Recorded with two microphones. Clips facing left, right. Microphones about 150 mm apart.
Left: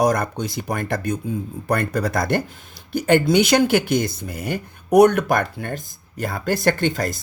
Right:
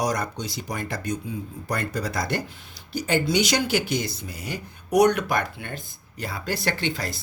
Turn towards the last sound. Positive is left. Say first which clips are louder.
# left 7 dB
turn(degrees=45)  # may be behind; listen again after turning